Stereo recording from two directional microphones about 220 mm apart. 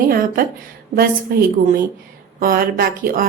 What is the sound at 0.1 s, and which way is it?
A woman's voice, 40° right (ahead or behind).